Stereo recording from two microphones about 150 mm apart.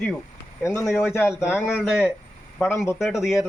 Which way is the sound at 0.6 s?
20° left (ahead or behind).